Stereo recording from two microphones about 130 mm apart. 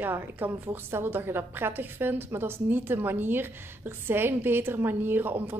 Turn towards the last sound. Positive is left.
turn(degrees=-15)  # may be behind; listen again after turning